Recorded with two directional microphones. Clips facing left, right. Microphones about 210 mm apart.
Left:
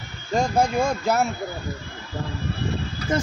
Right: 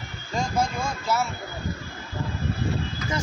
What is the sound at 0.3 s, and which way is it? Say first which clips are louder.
Speech: left 5 dB; 55° left (ahead or behind).